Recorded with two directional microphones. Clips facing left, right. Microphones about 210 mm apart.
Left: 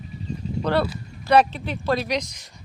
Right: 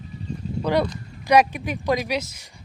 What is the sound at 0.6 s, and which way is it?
Speech, 10° right (ahead or behind).